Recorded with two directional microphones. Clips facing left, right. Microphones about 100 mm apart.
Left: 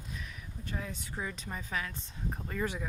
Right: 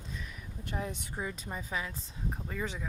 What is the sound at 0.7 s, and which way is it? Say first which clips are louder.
Speech: right 3 dB; 20° right (ahead or behind).